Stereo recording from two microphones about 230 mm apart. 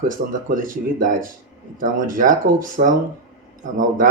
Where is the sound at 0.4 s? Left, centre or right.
Right.